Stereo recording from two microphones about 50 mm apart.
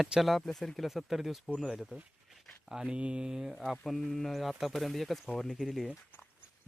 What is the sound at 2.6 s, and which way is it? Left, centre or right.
Speech, centre.